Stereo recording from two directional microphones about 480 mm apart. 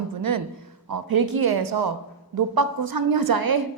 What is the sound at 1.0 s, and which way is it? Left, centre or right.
A woman's voice, right.